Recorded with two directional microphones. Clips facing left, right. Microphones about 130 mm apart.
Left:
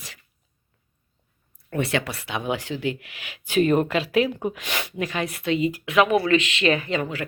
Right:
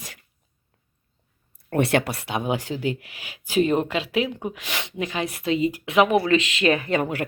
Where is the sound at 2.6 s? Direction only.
40° right (ahead or behind); by 4.8 s 5° right (ahead or behind).